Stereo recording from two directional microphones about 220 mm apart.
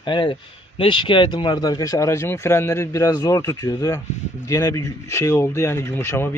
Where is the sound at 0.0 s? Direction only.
20° left (ahead or behind).